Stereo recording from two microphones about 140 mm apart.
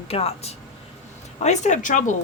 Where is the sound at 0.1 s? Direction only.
45° left (ahead or behind).